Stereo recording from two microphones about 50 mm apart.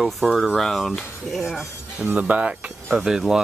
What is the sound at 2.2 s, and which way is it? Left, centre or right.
Speech, right.